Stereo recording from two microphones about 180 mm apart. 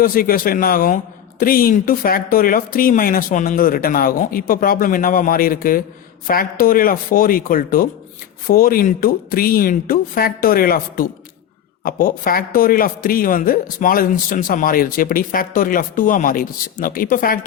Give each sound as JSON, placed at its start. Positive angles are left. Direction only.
{"t": 0.0, "sound": "a man's voice", "side_deg": 55}